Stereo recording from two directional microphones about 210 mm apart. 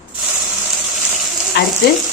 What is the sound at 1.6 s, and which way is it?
Frying, 50° left (ahead or behind).